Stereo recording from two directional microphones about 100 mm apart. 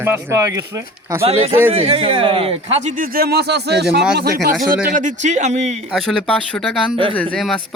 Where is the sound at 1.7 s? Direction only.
65° right (ahead or behind).